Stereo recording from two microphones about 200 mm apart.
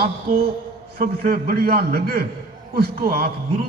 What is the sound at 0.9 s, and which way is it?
A man's voice, 45° right (ahead or behind).